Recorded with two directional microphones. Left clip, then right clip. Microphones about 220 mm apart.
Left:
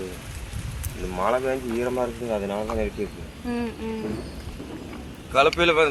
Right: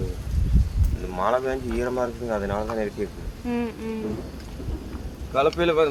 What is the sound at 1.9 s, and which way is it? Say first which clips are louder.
Speech: even; 15° left (ahead or behind).